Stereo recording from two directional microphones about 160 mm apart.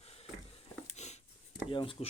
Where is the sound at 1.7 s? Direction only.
30° left (ahead or behind).